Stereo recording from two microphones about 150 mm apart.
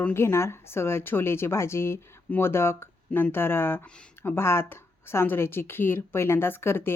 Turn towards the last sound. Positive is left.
turn(degrees=15)  # may be behind; listen again after turning